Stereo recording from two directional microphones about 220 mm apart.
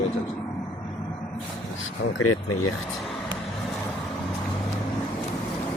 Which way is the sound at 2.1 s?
75° left (ahead or behind).